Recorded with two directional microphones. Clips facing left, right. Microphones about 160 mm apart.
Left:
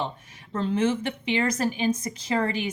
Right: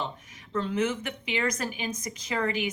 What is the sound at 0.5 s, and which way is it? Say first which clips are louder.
Speech: left 3 dB; 30° left (ahead or behind).